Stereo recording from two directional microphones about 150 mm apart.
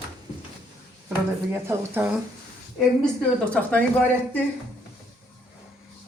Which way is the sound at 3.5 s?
10° left (ahead or behind).